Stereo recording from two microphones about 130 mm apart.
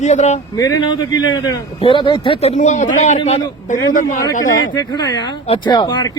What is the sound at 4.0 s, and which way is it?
Speech, 80° left.